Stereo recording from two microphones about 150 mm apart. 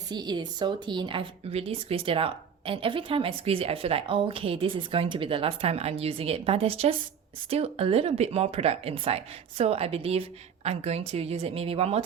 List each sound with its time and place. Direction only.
0.1 s speech: 30° right (ahead or behind)